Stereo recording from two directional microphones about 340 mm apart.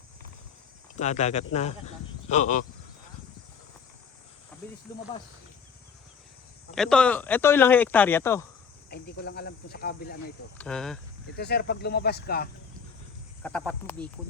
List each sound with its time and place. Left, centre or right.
0.9 s speech: centre
4.9 s speech: centre
6.7 s speech: centre
8.9 s speech: left
10.6 s speech: centre
11.3 s speech: left
13.4 s speech: centre